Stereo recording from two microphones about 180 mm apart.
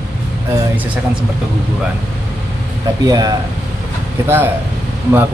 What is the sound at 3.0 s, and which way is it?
Speech, 20° right (ahead or behind).